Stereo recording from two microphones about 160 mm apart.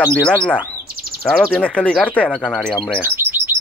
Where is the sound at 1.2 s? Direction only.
5° left (ahead or behind).